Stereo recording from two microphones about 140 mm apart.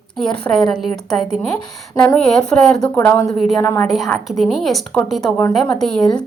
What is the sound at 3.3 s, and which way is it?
A woman's voice, centre (ahead or behind).